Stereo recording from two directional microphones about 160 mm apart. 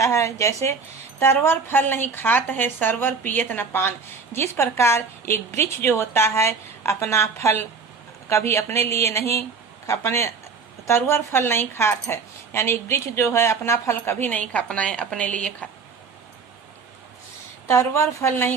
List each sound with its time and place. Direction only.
0.0 s a woman's voice: 20° left (ahead or behind)
17.7 s a woman's voice: 15° left (ahead or behind)